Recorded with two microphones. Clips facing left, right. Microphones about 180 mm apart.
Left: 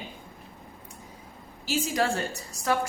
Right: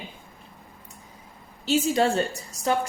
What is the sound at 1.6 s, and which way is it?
Speech, 25° right (ahead or behind).